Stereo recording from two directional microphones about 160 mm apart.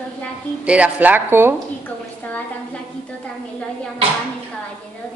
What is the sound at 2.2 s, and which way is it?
Speech, 10° left (ahead or behind).